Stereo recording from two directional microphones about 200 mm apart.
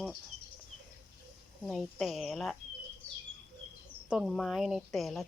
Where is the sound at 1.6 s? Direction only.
Centre (ahead or behind).